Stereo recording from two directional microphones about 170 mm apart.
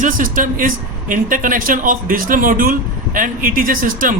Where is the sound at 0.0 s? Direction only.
50° right (ahead or behind).